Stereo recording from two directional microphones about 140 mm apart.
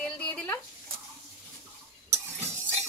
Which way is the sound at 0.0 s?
10° left (ahead or behind).